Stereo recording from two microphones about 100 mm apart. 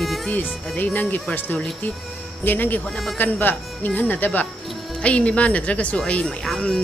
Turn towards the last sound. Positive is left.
turn(degrees=0)  # may be behind; listen again after turning